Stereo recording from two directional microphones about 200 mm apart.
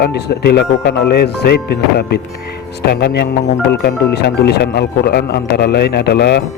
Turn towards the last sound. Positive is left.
turn(degrees=55)  # may be behind; listen again after turning